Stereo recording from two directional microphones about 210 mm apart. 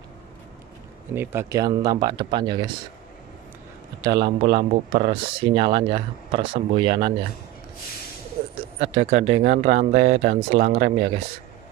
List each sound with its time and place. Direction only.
1.1 s speech: 10° right (ahead or behind)
4.0 s speech: 20° right (ahead or behind)
8.4 s a sound: 25° right (ahead or behind)
8.9 s speech: 30° right (ahead or behind)